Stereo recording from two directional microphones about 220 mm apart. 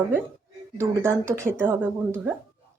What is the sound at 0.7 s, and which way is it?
A woman's voice, 10° right (ahead or behind).